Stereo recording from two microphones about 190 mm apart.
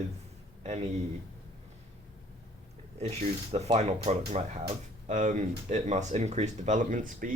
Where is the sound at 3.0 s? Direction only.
35° right (ahead or behind).